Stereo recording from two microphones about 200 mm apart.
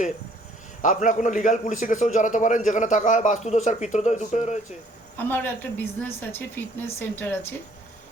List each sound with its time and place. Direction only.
0.8 s a man's voice: 40° left (ahead or behind)
5.1 s a woman's voice: 10° left (ahead or behind)